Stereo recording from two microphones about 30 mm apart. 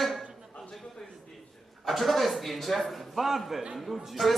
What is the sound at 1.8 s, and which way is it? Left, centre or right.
A man's voice, centre.